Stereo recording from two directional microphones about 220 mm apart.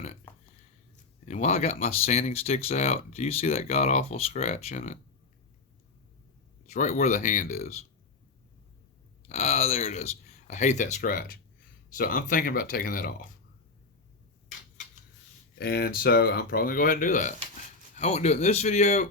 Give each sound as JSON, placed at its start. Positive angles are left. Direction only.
{"t": 1.2, "sound": "speech", "side_deg": 30}
{"t": 6.7, "sound": "speech", "side_deg": 35}
{"t": 9.3, "sound": "speech", "side_deg": 30}
{"t": 15.5, "sound": "speech", "side_deg": 45}